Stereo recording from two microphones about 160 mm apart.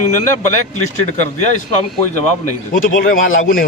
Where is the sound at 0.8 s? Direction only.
50° left (ahead or behind).